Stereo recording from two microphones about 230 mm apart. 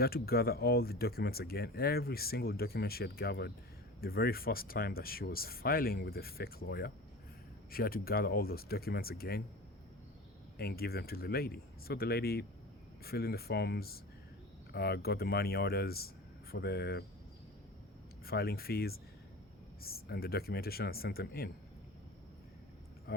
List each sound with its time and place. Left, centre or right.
0.0 s speech: left
10.6 s speech: left
18.3 s speech: left
23.1 s speech: left